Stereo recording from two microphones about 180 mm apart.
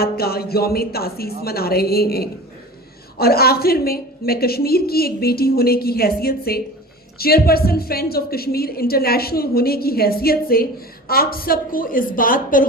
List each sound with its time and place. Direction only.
0.0 s a woman's voice: 60° left (ahead or behind)